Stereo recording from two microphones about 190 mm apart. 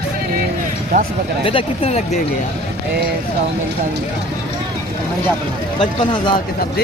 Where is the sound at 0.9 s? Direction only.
50° right (ahead or behind).